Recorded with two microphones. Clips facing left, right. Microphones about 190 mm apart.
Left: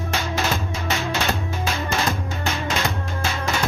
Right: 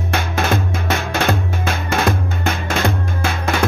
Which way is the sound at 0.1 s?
55° right (ahead or behind).